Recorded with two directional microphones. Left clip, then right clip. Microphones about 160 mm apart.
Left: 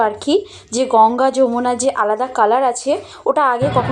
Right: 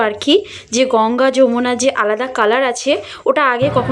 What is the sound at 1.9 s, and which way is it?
Speech, 40° right (ahead or behind).